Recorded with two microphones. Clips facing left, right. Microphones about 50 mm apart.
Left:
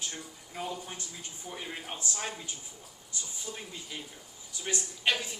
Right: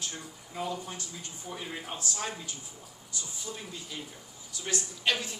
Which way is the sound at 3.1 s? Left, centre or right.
Left.